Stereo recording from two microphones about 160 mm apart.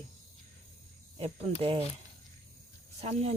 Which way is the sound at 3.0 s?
40° right (ahead or behind).